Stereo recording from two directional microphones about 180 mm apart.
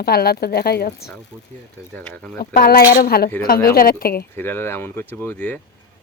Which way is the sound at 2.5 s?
55° left (ahead or behind).